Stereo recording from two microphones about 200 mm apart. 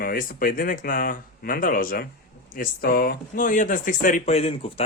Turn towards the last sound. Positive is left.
turn(degrees=30)  # may be behind; listen again after turning